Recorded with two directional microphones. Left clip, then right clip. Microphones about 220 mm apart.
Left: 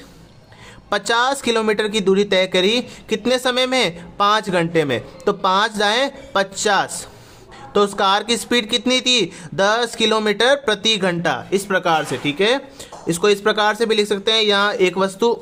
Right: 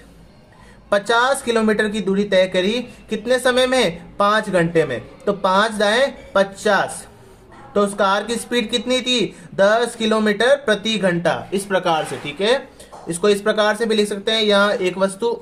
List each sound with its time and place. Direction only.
0.9 s speech: 30° left (ahead or behind)